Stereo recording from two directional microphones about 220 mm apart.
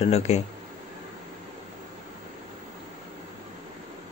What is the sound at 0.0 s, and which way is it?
Speech, 30° left (ahead or behind).